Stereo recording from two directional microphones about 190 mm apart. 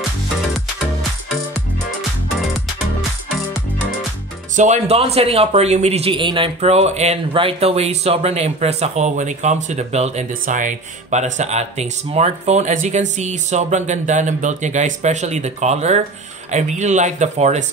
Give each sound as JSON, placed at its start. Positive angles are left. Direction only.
{"t": 4.6, "sound": "a man's voice", "side_deg": -35}